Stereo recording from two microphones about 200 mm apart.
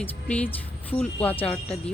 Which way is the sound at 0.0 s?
5° left (ahead or behind).